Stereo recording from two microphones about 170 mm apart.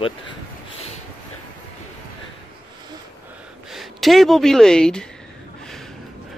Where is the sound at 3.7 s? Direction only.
Centre (ahead or behind).